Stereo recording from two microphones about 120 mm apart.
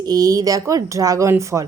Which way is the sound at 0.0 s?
30° right (ahead or behind).